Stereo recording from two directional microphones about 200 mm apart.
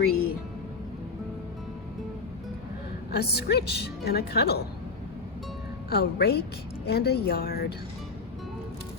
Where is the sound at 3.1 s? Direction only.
55° left (ahead or behind).